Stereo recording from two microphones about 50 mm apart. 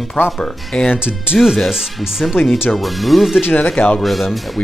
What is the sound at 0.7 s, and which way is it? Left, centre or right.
Speech, left.